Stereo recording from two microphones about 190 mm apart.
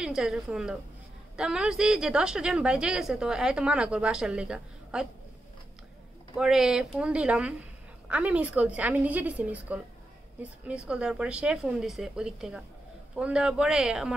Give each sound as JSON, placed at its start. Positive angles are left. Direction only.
{"t": 0.0, "sound": "a woman's voice", "side_deg": -5}
{"t": 6.3, "sound": "a woman's voice", "side_deg": -5}